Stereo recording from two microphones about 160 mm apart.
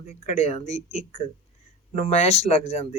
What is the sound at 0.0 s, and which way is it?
Speech, 45° left (ahead or behind).